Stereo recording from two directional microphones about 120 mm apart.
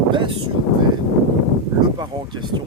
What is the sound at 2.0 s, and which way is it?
Speech, 40° right (ahead or behind).